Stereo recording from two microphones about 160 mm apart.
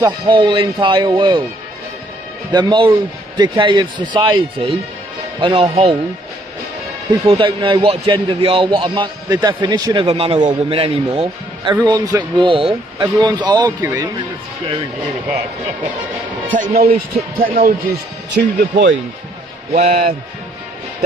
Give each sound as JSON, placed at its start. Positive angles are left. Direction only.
{"t": 0.3, "sound": "a man's voice", "side_deg": -30}
{"t": 2.5, "sound": "a man's voice", "side_deg": -30}
{"t": 7.1, "sound": "a man's voice", "side_deg": -25}
{"t": 16.5, "sound": "a man's voice", "side_deg": -60}
{"t": 19.7, "sound": "a man's voice", "side_deg": -45}